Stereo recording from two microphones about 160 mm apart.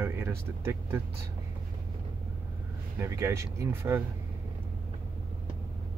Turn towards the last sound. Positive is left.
turn(degrees=-15)  # may be behind; listen again after turning